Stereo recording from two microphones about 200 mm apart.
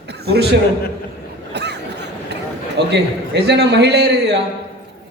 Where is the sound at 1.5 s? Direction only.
55° right (ahead or behind).